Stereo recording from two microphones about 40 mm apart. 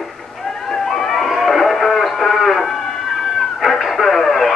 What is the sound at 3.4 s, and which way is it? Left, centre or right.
Radio, centre.